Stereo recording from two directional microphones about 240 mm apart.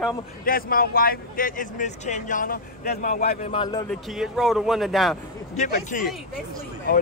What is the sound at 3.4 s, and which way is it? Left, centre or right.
Speech, centre.